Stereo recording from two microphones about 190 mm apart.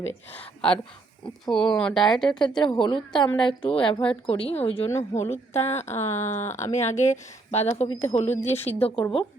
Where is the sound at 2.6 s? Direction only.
25° left (ahead or behind).